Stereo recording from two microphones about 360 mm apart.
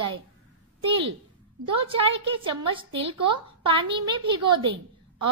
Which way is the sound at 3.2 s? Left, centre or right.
Centre.